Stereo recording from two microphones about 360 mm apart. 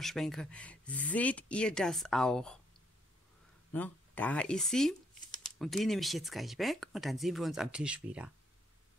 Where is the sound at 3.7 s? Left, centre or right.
Centre.